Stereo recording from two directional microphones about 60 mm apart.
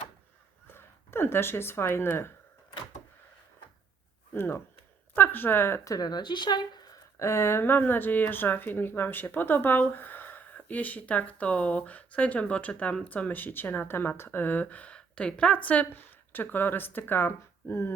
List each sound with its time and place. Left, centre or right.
0.7 s speech: left
4.4 s speech: left
5.8 s speech: left
7.2 s speech: left